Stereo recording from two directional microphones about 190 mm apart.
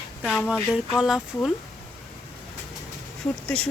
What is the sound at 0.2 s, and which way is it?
Speech, centre (ahead or behind).